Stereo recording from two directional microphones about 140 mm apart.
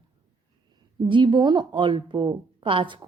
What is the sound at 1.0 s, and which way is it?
A woman's voice, 35° right (ahead or behind).